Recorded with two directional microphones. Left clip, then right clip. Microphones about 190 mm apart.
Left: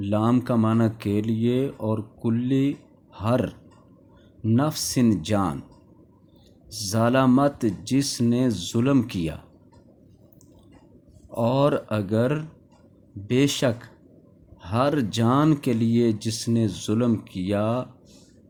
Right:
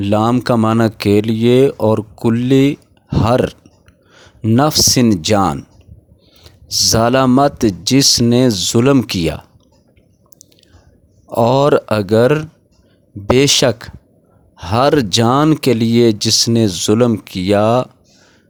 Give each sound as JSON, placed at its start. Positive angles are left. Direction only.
{"t": 0.0, "sound": "speech", "side_deg": -50}
{"t": 6.7, "sound": "speech", "side_deg": -45}
{"t": 11.3, "sound": "speech", "side_deg": -50}